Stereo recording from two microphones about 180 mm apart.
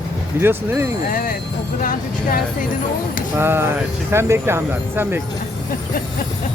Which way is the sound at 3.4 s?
15° right (ahead or behind).